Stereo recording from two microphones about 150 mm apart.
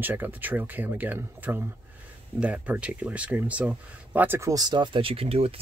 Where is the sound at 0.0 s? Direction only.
15° right (ahead or behind).